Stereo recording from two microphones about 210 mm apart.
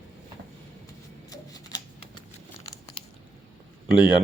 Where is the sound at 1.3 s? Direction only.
20° left (ahead or behind).